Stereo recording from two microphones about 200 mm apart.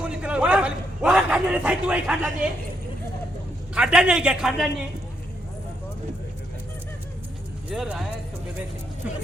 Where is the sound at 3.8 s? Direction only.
5° right (ahead or behind).